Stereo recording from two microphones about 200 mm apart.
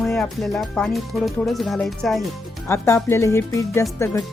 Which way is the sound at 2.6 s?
10° left (ahead or behind).